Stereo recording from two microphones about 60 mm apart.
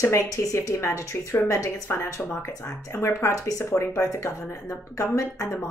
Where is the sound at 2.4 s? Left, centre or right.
Left.